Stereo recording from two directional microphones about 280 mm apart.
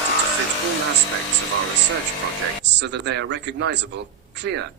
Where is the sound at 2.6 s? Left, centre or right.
Right.